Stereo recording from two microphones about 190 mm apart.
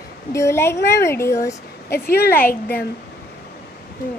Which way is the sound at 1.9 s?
55° left (ahead or behind).